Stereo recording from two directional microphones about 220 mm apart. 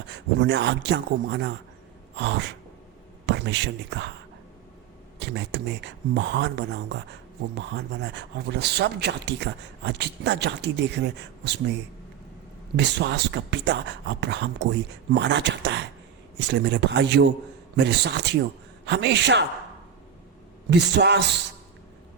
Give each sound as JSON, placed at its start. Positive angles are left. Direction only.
{"t": 0.1, "sound": "speech", "side_deg": -50}
{"t": 5.2, "sound": "speech", "side_deg": -50}
{"t": 12.7, "sound": "speech", "side_deg": -50}
{"t": 20.7, "sound": "speech", "side_deg": -50}